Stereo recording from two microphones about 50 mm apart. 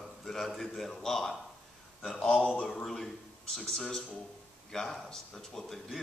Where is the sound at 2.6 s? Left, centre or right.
Centre.